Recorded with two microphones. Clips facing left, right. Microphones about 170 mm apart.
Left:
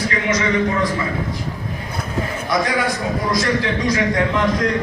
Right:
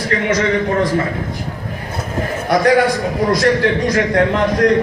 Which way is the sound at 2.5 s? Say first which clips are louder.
Right 8 dB; 55° right (ahead or behind).